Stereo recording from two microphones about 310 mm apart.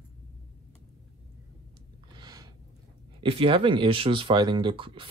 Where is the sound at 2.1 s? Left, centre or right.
Centre.